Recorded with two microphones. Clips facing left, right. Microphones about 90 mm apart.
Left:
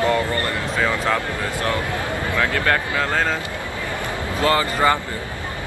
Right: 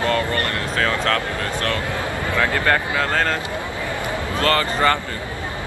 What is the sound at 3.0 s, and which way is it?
Speech, 5° left (ahead or behind).